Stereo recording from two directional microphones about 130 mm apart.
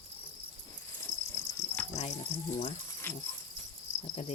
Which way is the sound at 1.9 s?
65° left (ahead or behind).